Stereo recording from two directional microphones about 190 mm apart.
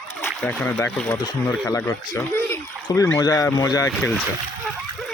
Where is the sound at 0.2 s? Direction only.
10° left (ahead or behind).